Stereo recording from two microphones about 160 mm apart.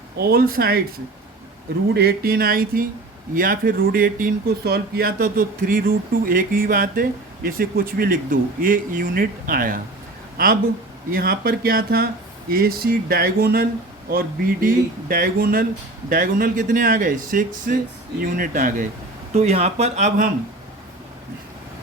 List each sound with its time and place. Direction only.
0.2 s speech: 75° right (ahead or behind)
1.9 s speech: 80° right; by 18.9 s 55° right (ahead or behind)
19.3 s speech: 40° right (ahead or behind)